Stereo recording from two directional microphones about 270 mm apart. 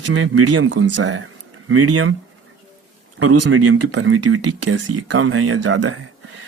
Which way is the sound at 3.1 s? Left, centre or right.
Right.